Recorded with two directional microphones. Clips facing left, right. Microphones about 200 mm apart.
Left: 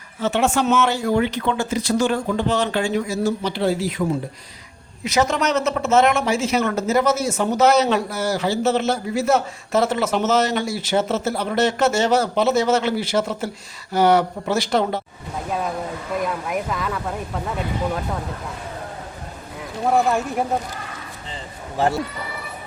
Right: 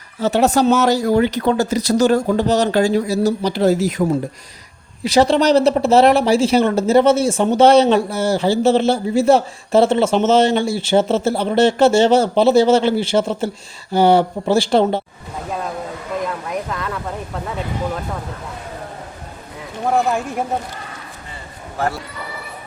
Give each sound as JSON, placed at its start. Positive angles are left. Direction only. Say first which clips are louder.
{"t": 0.2, "sound": "speech", "louder": "right 5 dB", "side_deg": -40}
{"t": 5.0, "sound": "speech", "louder": "right 6 dB", "side_deg": -30}
{"t": 16.2, "sound": "speech", "louder": "even", "side_deg": 0}
{"t": 19.8, "sound": "speech", "louder": "right 1 dB", "side_deg": 0}